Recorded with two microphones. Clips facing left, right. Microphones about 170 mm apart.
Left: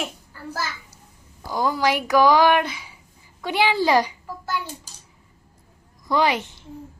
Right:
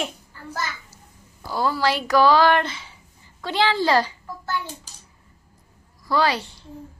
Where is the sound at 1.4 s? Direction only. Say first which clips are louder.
Left 1 dB; 15° left (ahead or behind).